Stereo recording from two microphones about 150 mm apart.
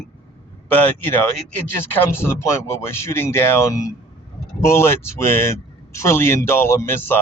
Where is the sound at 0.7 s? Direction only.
15° left (ahead or behind).